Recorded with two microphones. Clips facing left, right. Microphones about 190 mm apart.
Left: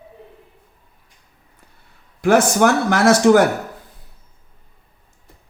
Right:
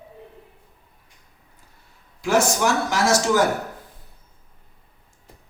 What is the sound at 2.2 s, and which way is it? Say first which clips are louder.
Speech: left 6 dB; 55° left (ahead or behind).